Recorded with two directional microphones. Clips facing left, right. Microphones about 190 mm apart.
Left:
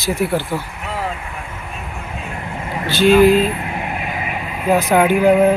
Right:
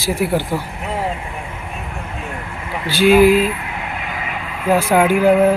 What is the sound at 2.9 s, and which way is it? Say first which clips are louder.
Speech: even; 10° right (ahead or behind).